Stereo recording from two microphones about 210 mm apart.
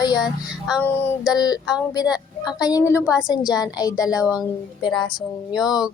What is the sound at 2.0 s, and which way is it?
Speech, 5° right (ahead or behind).